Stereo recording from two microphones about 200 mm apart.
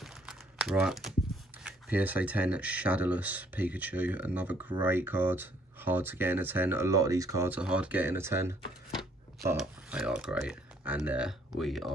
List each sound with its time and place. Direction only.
0.0 s crumpling: centre (ahead or behind)
1.6 s speech: 5° right (ahead or behind)
9.6 s speech: 5° right (ahead or behind)